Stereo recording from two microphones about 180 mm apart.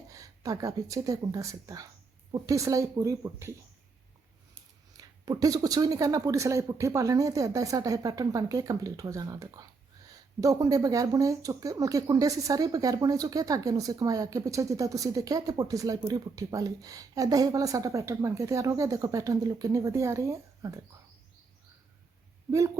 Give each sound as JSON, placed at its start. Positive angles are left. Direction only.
{"t": 0.1, "sound": "speech", "side_deg": -20}
{"t": 4.9, "sound": "speech", "side_deg": -20}
{"t": 22.5, "sound": "speech", "side_deg": -15}